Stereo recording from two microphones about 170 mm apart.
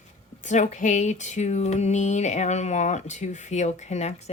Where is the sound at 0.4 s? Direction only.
45° left (ahead or behind).